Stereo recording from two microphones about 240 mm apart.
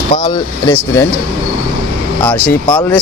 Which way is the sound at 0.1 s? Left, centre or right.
Centre.